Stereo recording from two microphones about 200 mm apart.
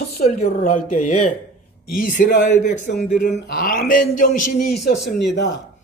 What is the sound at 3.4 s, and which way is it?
Speech, 50° left (ahead or behind).